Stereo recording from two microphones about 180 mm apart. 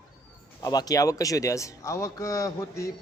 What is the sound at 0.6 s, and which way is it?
A man's voice, 20° left (ahead or behind).